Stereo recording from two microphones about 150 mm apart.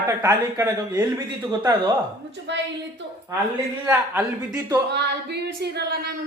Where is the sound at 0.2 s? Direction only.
20° right (ahead or behind).